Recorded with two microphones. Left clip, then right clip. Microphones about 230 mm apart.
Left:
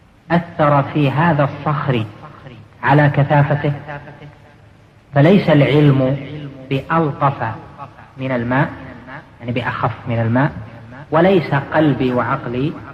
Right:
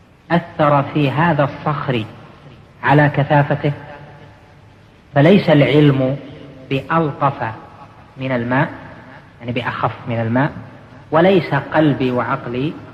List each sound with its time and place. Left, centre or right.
0.3 s a man's voice: left
5.1 s a man's voice: left